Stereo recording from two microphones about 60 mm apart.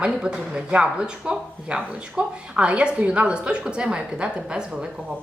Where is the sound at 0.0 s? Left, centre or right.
Centre.